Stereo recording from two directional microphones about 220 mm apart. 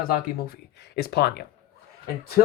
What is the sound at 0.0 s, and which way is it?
Speech, 40° left (ahead or behind).